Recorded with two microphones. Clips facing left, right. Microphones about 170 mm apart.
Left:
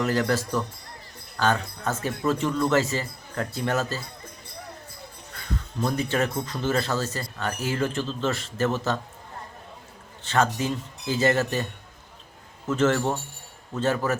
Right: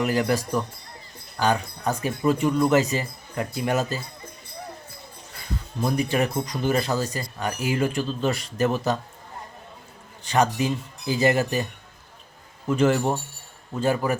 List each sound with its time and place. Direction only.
0.0 s speech: 15° right (ahead or behind)
5.8 s speech: 15° right (ahead or behind)
10.2 s speech: 15° right (ahead or behind)
12.6 s speech: 15° right (ahead or behind)